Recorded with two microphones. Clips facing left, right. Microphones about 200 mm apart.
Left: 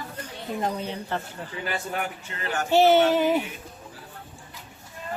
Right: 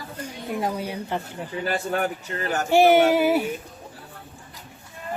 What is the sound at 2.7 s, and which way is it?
Speech, 10° right (ahead or behind).